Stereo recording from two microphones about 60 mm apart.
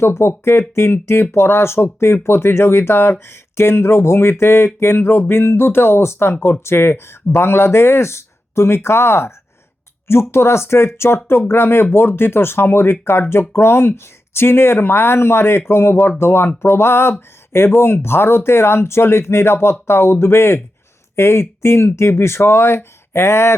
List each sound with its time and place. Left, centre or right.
0.0 s speech: left